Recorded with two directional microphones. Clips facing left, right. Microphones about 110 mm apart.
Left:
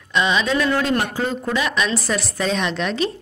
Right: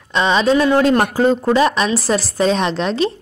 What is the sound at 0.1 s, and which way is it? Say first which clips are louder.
A woman's voice: right 5 dB; 35° right (ahead or behind).